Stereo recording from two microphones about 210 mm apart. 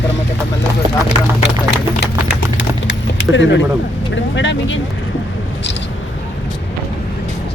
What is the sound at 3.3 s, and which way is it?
Speech, 60° left (ahead or behind).